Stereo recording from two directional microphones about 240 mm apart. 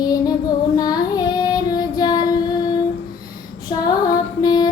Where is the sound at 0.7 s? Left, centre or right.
Centre.